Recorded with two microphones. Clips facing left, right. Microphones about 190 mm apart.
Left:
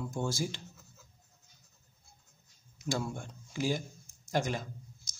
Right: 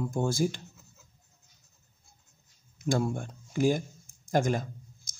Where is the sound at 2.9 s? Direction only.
55° right (ahead or behind).